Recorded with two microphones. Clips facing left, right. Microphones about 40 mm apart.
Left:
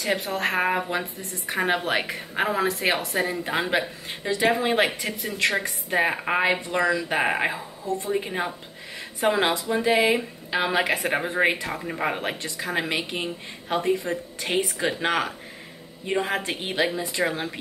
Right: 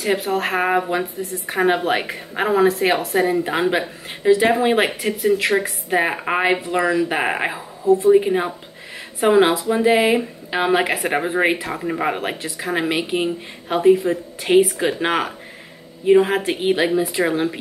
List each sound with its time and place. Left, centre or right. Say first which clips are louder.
0.0 s a woman's voice: right 5 dB; centre